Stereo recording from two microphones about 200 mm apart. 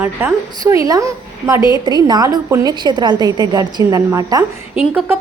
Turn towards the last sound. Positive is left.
turn(degrees=-5)  # may be behind; listen again after turning